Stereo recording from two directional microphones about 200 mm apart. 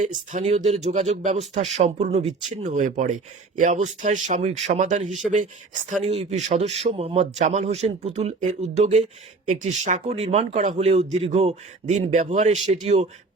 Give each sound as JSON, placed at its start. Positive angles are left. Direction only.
{"t": 0.0, "sound": "speech", "side_deg": -40}